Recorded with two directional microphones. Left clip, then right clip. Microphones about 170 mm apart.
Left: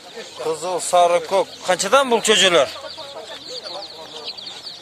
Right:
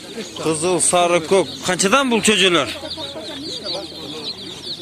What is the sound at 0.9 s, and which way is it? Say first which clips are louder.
Speech: left 1 dB; 5° left (ahead or behind).